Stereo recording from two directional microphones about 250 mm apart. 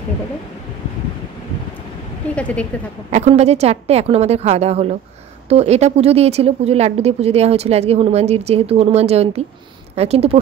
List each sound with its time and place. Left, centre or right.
2.3 s a woman's voice: centre
3.1 s speech: right